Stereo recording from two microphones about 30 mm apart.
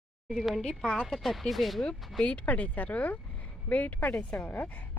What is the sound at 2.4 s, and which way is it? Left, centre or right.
A woman's voice, left.